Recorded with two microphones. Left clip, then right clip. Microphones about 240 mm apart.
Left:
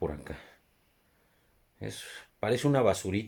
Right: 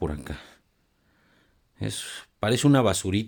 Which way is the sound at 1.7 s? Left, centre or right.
Right.